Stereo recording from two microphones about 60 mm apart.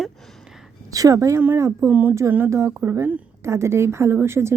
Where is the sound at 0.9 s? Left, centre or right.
Right.